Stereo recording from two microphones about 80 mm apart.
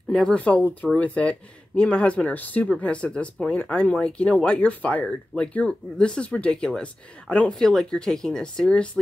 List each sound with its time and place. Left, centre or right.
0.1 s speech: centre